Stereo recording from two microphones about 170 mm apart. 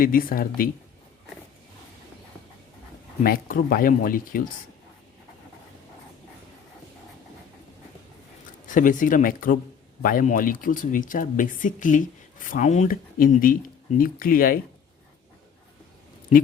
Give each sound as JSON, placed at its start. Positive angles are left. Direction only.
{"t": 0.0, "sound": "speech", "side_deg": 55}
{"t": 3.2, "sound": "speech", "side_deg": 60}
{"t": 8.6, "sound": "speech", "side_deg": 50}